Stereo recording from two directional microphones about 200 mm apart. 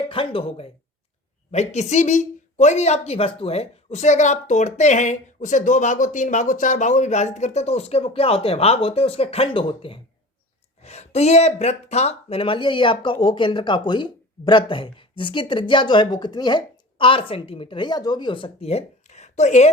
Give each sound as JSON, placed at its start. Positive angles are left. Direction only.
{"t": 0.1, "sound": "a woman's voice", "side_deg": 25}